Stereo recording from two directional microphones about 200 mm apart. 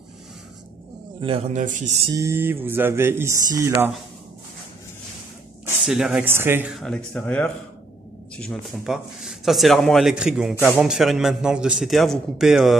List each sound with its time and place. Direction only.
1.2 s speech: 30° right (ahead or behind)
2.0 s speech: 15° right (ahead or behind)
5.9 s speech: 5° right (ahead or behind)